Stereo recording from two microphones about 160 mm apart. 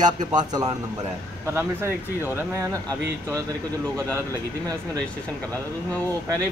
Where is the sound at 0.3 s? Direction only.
25° right (ahead or behind).